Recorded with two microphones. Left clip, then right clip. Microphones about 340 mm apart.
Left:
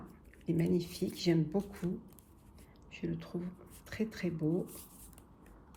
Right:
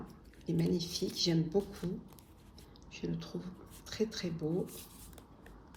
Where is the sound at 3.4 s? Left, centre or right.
Centre.